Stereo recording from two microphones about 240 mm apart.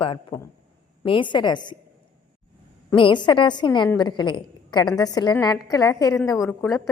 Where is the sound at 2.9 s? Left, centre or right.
Centre.